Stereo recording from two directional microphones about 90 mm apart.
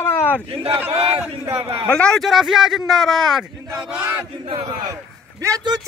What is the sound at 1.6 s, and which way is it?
Speech, 75° right (ahead or behind).